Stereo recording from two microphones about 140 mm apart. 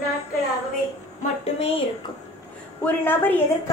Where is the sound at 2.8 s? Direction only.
15° left (ahead or behind).